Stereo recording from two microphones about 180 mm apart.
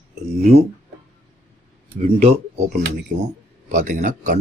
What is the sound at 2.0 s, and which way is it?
Speech, 35° right (ahead or behind).